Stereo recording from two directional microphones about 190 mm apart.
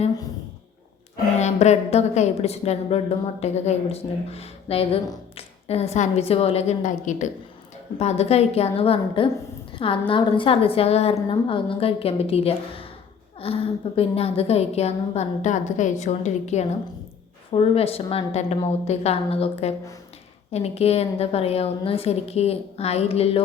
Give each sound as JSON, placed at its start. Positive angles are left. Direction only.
{"t": 1.4, "sound": "a woman's voice", "side_deg": 35}